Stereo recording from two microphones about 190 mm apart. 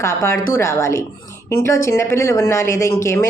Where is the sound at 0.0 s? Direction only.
15° left (ahead or behind).